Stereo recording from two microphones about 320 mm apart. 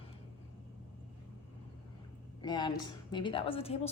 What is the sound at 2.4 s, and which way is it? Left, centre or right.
A woman's voice, centre.